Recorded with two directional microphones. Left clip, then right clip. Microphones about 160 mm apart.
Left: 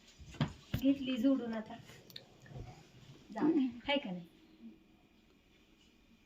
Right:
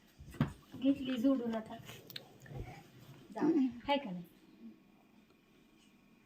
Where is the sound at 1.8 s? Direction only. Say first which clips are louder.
Right 4 dB; 50° right (ahead or behind).